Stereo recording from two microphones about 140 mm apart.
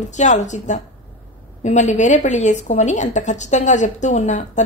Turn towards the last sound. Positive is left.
turn(degrees=60)  # may be behind; listen again after turning